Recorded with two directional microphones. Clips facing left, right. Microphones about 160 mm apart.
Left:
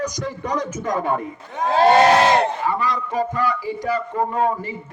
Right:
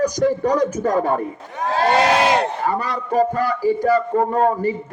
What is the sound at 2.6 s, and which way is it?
A man's voice, 45° right (ahead or behind).